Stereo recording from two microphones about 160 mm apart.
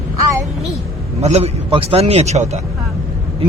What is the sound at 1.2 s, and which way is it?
A man's voice, 40° right (ahead or behind).